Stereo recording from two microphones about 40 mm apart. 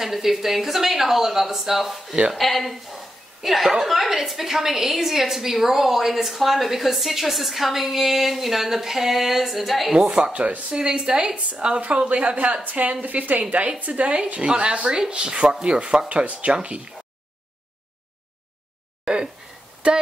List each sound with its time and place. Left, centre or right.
0.0 s a woman's voice: centre
9.9 s speech: right
10.8 s speech: centre
11.3 s a woman's voice: right
19.0 s a sound: centre
19.8 s speech: right